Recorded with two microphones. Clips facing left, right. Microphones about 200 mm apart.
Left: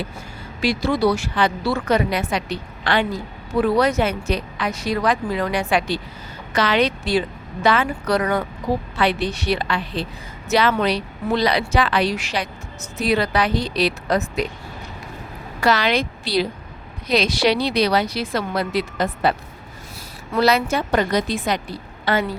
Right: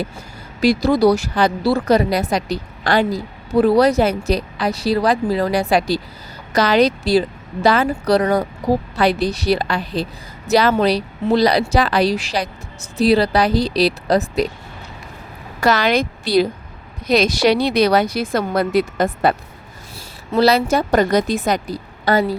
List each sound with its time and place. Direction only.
0.6 s speech: 40° right (ahead or behind)
15.6 s speech: 45° right (ahead or behind)
20.3 s speech: 35° right (ahead or behind)